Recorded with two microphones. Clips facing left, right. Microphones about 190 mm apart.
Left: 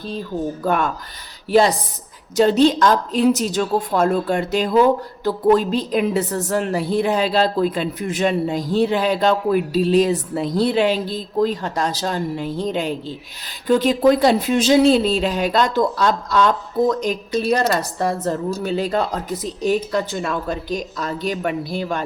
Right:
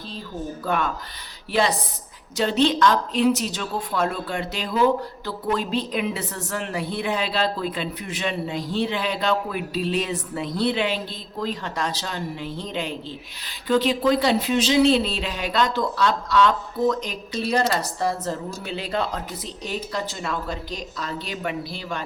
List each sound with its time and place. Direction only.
0.6 s speech: 45° left (ahead or behind)
2.3 s a woman's voice: 40° left (ahead or behind)
17.6 s speech: 50° left (ahead or behind)